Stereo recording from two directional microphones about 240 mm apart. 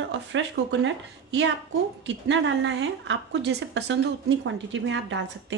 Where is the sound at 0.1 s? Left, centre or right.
Right.